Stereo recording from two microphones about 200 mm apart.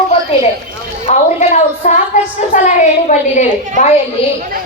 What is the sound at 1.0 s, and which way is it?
A woman's voice, 35° left (ahead or behind).